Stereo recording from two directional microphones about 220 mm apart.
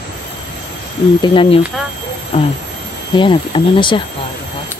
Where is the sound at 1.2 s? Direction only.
25° left (ahead or behind).